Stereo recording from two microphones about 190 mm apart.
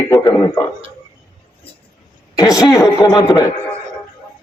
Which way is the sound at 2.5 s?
20° left (ahead or behind).